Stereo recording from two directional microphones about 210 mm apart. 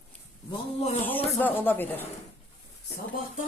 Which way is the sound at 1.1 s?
10° left (ahead or behind).